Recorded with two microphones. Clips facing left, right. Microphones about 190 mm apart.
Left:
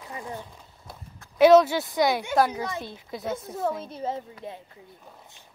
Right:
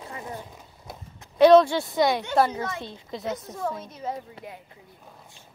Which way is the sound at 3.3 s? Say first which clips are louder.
Left 2 dB; 25° left (ahead or behind).